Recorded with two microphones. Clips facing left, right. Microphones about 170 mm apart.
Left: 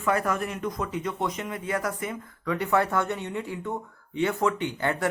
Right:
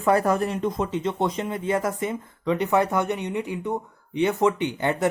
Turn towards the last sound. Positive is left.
turn(degrees=-20)  # may be behind; listen again after turning